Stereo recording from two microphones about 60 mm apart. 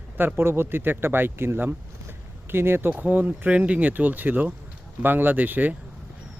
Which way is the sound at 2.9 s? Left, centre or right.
Right.